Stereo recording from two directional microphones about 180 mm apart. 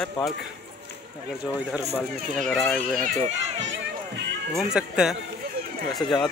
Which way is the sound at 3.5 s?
90° right.